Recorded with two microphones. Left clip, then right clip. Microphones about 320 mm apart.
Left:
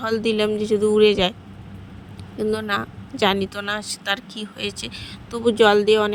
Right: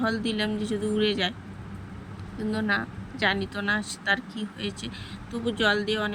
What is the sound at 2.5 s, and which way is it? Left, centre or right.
Speech, centre.